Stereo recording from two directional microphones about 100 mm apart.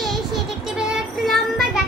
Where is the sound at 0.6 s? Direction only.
5° right (ahead or behind).